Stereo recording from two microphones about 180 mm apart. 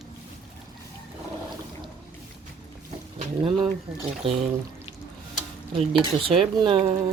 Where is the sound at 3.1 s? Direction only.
30° right (ahead or behind).